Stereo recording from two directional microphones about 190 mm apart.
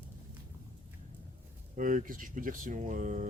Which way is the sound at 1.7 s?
45° right (ahead or behind).